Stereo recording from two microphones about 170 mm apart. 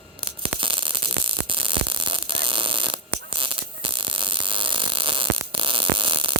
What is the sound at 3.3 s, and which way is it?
Mains hum, 30° right (ahead or behind).